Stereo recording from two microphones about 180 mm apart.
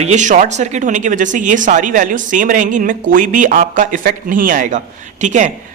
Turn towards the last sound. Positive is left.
turn(degrees=-45)  # may be behind; listen again after turning